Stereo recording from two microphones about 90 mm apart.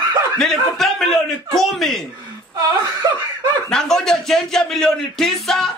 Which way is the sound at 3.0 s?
45° right (ahead or behind).